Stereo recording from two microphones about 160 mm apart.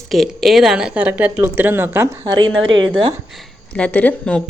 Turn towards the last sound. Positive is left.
turn(degrees=10)  # may be behind; listen again after turning